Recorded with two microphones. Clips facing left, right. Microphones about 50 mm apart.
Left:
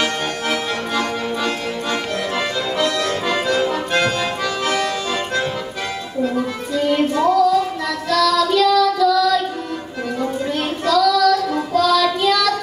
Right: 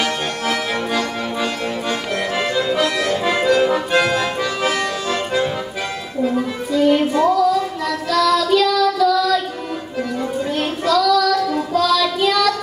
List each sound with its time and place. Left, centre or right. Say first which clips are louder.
0.0 s accordion: even; centre
1.4 s accordion: even; centre
6.2 s music: right 2 dB; centre
8.3 s child singing: even; centre
10.5 s child singing: right 1 dB; centre